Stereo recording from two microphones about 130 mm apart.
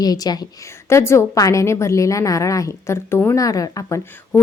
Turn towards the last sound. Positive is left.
turn(degrees=25)  # may be behind; listen again after turning